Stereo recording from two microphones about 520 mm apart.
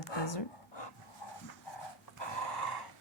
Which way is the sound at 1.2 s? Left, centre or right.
Left.